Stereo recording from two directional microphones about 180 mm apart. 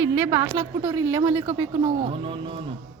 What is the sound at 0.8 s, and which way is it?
Speech, 15° right (ahead or behind).